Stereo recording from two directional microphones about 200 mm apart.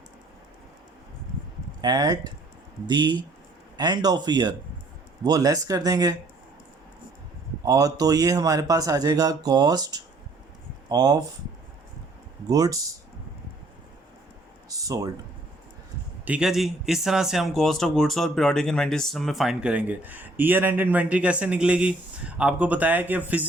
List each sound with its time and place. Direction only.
1.8 s speech: 20° right (ahead or behind)
7.6 s speech: 15° right (ahead or behind)
12.5 s speech: 15° right (ahead or behind)
14.7 s a sound: 15° right (ahead or behind)
16.2 s speech: 5° right (ahead or behind)